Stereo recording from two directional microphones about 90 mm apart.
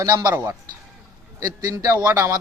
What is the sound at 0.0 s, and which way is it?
A man's voice, 45° right (ahead or behind).